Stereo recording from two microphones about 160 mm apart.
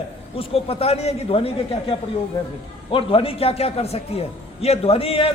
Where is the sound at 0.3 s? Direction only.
40° left (ahead or behind).